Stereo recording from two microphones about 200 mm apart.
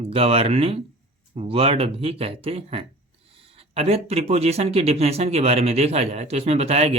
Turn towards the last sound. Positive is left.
turn(degrees=-30)  # may be behind; listen again after turning